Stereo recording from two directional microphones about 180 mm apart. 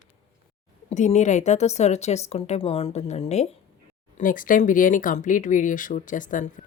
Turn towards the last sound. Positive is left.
turn(degrees=45)  # may be behind; listen again after turning